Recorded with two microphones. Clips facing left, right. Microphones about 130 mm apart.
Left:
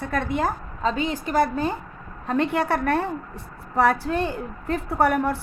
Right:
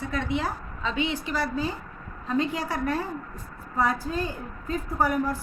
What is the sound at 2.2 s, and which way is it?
A woman's voice, 65° left (ahead or behind).